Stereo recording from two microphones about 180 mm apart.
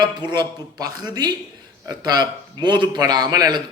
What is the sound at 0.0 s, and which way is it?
A man's voice, 25° right (ahead or behind).